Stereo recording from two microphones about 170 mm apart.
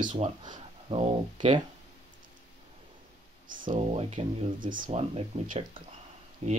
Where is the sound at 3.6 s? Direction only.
50° right (ahead or behind).